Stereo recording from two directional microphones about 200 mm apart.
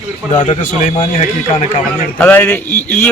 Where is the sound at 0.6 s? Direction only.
40° left (ahead or behind).